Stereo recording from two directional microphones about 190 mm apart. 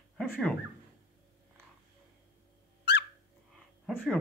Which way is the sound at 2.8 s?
65° left (ahead or behind).